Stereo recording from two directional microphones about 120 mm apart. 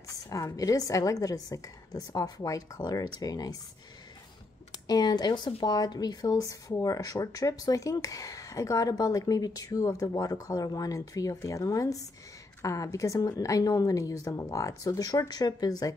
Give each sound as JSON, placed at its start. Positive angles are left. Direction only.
{"t": 0.1, "sound": "speech", "side_deg": 30}
{"t": 4.8, "sound": "speech", "side_deg": 35}